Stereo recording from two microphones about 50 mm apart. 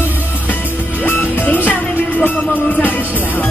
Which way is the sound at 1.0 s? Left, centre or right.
Left.